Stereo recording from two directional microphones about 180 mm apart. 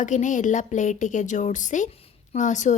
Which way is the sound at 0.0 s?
45° left (ahead or behind).